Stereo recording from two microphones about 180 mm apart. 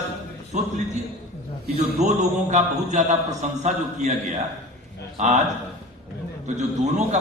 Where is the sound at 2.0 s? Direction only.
40° right (ahead or behind).